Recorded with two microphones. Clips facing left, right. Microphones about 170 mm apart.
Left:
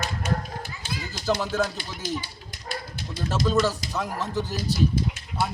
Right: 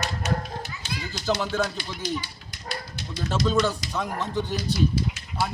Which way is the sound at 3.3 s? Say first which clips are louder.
Even; 5° left (ahead or behind).